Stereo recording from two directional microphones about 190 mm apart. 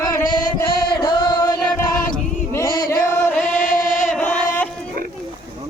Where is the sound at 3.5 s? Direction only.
45° left (ahead or behind).